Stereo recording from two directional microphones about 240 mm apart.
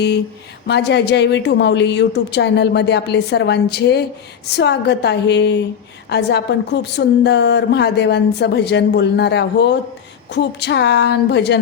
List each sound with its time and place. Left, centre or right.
0.7 s a woman's voice: left